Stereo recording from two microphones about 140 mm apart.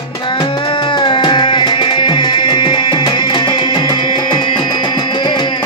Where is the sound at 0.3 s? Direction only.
35° left (ahead or behind).